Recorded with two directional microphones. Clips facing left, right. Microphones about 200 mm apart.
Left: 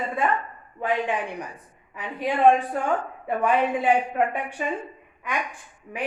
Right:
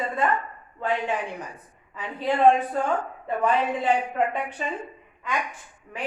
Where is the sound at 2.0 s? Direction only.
15° left (ahead or behind).